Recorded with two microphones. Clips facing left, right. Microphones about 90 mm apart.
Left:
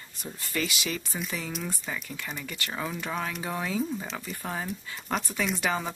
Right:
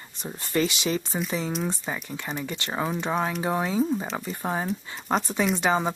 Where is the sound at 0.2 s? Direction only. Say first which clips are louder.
Right 7 dB; 30° right (ahead or behind).